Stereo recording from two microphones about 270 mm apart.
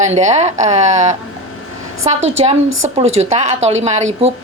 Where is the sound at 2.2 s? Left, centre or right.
Right.